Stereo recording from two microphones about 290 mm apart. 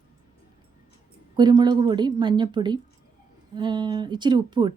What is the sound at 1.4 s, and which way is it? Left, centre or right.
Speech, centre.